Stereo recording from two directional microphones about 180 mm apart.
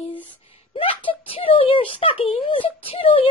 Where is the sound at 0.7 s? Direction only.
30° left (ahead or behind).